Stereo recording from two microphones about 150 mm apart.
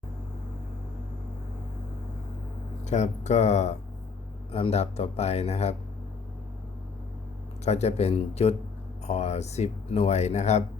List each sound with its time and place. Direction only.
2.8 s speech: 50° left (ahead or behind)
7.6 s speech: 45° left (ahead or behind)